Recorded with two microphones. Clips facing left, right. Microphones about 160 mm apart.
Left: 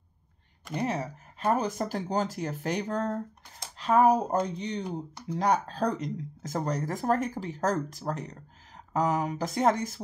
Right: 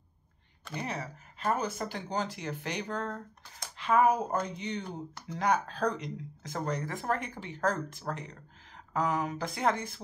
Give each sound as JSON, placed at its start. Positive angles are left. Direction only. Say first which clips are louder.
{"t": 0.7, "sound": "speech", "louder": "left 7 dB", "side_deg": 40}
{"t": 4.8, "sound": "speech", "louder": "left 5 dB", "side_deg": 15}
{"t": 5.4, "sound": "speech", "louder": "left 2 dB", "side_deg": 35}